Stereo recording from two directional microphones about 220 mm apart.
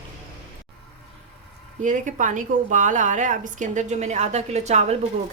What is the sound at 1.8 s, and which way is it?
A woman's voice, 35° right (ahead or behind).